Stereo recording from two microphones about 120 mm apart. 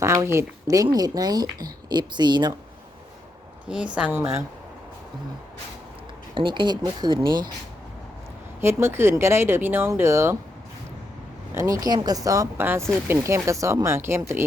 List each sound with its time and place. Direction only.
0.0 s speech: 25° right (ahead or behind)
3.9 s a woman's voice: 15° right (ahead or behind)
6.3 s speech: 40° right (ahead or behind)
8.6 s speech: 20° right (ahead or behind)
11.5 s speech: 25° right (ahead or behind)
12.5 s speech: 20° right (ahead or behind)